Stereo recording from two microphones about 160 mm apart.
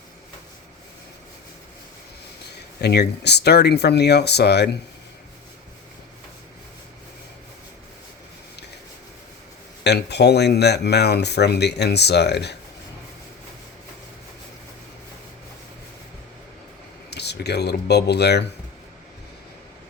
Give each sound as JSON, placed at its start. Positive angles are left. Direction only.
{"t": 2.8, "sound": "speech", "side_deg": 90}
{"t": 9.8, "sound": "speech", "side_deg": 90}
{"t": 17.1, "sound": "speech", "side_deg": 90}